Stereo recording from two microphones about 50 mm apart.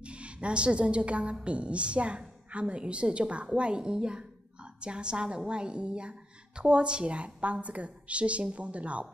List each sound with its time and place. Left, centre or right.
0.0 s a woman's voice: right